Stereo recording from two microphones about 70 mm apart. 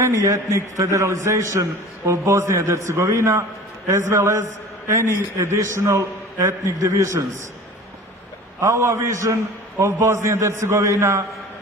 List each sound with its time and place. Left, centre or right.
0.0 s a man's voice: right
8.5 s a man's voice: right